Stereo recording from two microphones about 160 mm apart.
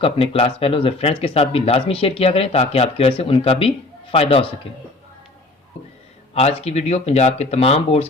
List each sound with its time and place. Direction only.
0.0 s speech: 35° left (ahead or behind)
6.3 s speech: 40° left (ahead or behind)